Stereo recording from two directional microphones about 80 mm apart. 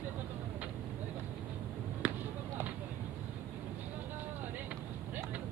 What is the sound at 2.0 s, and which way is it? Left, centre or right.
Basketball bounce, centre.